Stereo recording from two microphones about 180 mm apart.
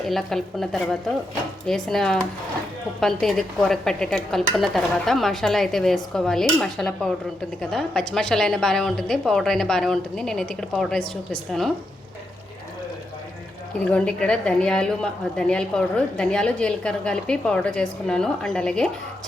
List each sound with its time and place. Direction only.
0.1 s a woman's voice: centre (ahead or behind)
13.9 s a woman's voice: 5° left (ahead or behind)